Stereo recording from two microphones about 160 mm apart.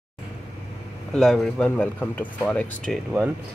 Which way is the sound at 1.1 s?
5° left (ahead or behind).